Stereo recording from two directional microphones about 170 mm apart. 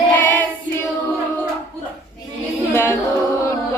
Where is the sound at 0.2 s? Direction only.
10° left (ahead or behind).